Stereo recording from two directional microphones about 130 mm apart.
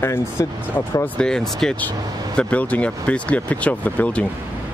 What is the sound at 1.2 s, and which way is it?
Speech, 5° left (ahead or behind).